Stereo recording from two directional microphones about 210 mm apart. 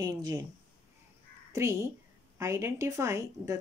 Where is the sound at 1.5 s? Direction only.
15° right (ahead or behind).